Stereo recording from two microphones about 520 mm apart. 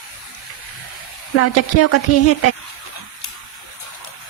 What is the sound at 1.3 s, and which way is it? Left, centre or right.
A woman's voice, left.